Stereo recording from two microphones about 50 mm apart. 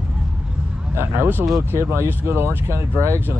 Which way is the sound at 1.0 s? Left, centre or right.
Right.